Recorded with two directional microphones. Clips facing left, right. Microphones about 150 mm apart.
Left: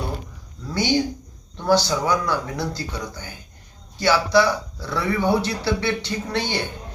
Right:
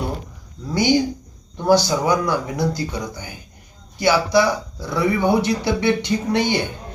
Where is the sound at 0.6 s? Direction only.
15° right (ahead or behind).